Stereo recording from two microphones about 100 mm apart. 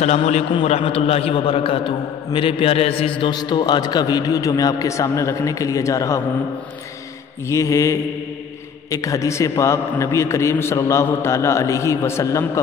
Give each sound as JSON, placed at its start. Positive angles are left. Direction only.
{"t": 0.1, "sound": "a man's voice", "side_deg": 90}
{"t": 3.3, "sound": "a man's voice", "side_deg": 45}
{"t": 7.4, "sound": "a man's voice", "side_deg": 30}